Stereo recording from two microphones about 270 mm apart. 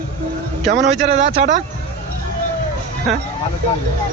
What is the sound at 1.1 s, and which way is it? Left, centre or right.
Speech, right.